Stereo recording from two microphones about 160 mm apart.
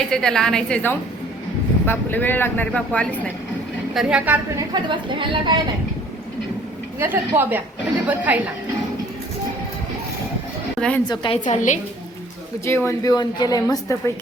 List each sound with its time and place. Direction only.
0.1 s a woman's voice: 5° left (ahead or behind)
3.9 s a woman's voice: 5° right (ahead or behind)
4.7 s a woman's voice: 30° right (ahead or behind)
7.0 s a woman's voice: 15° right (ahead or behind)
10.8 s a woman's voice: 5° left (ahead or behind)
11.1 s a woman's voice: 30° left (ahead or behind)
11.5 s a woman's voice: 50° left (ahead or behind)
12.6 s a woman's voice: 15° left (ahead or behind)